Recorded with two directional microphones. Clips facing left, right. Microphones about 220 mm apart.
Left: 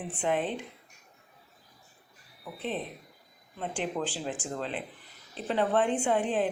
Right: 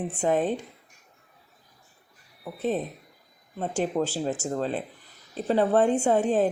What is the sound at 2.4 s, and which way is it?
Speech, 45° right (ahead or behind).